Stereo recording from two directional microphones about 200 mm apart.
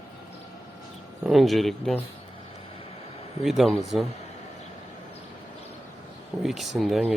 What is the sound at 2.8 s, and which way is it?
Vehicle, 30° left (ahead or behind).